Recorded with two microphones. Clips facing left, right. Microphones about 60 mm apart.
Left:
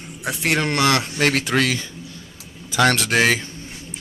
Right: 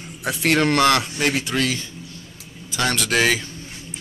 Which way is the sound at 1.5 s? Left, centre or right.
Left.